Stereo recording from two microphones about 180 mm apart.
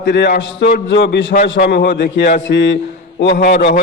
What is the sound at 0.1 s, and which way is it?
A man's voice, 70° left (ahead or behind).